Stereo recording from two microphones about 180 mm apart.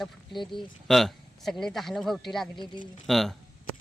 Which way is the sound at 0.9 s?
Centre (ahead or behind).